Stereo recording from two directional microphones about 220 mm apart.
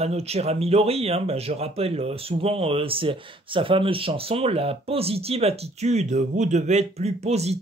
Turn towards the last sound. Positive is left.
turn(degrees=-30)  # may be behind; listen again after turning